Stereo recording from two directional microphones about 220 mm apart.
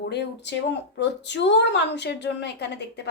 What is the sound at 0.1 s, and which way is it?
A woman's voice, 50° left (ahead or behind).